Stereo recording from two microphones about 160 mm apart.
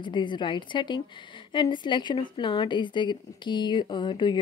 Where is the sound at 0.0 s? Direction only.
30° left (ahead or behind).